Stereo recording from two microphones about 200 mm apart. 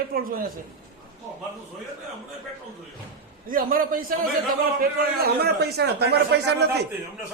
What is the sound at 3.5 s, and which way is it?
A man's voice, 45° right (ahead or behind).